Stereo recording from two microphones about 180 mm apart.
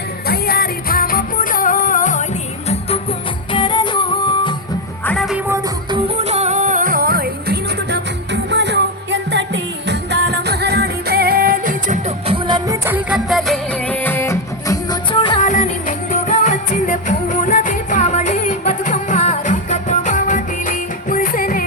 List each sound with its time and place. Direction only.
0.3 s music: 55° left (ahead or behind)
2.6 s music: 35° left (ahead or behind)
5.0 s music: centre (ahead or behind)
5.5 s music: 20° right (ahead or behind)
6.1 s music: 35° right (ahead or behind); by 15.4 s 25° left (ahead or behind)
15.4 s music: 45° left (ahead or behind)